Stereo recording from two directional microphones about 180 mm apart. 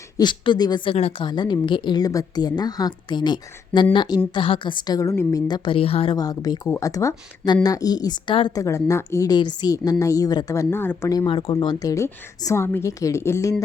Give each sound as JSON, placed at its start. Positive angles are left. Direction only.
{"t": 0.2, "sound": "speech", "side_deg": 25}
{"t": 6.1, "sound": "speech", "side_deg": 20}
{"t": 11.3, "sound": "a woman's voice", "side_deg": 30}